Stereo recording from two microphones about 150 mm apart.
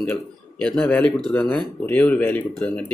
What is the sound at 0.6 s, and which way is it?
Speech, 5° left (ahead or behind).